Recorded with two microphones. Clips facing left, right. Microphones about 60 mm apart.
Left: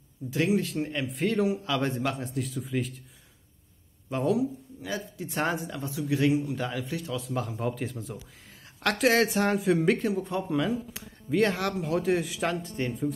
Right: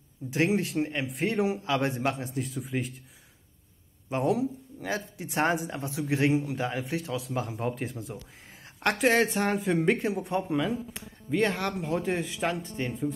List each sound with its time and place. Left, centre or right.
0.3 s a man's voice: right
2.4 s speech: centre
4.3 s a man's voice: right
7.2 s speech: centre
10.0 s speech: right
10.3 s speech: centre